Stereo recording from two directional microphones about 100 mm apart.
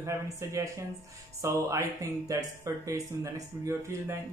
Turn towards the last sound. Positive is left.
turn(degrees=-30)  # may be behind; listen again after turning